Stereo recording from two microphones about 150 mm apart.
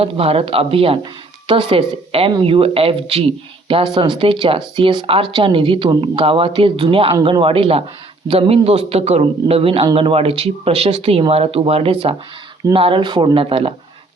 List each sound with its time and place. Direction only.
0.0 s a man's voice: 40° right (ahead or behind)